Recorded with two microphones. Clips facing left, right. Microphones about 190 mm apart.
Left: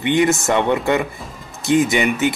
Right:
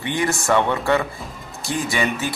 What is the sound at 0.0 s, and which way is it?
A man's voice, 20° left (ahead or behind).